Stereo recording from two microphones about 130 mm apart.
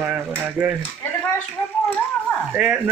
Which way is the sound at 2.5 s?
10° right (ahead or behind).